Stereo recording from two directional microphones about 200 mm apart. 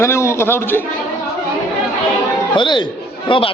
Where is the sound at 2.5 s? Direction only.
25° left (ahead or behind).